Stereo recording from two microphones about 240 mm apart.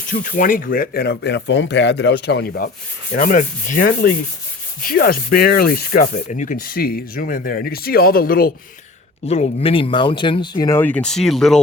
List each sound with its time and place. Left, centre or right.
0.1 s speech: left
3.1 s rub: left
9.2 s speech: left; by 11.6 s centre